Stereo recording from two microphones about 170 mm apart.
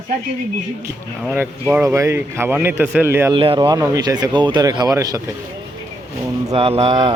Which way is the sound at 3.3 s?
30° right (ahead or behind).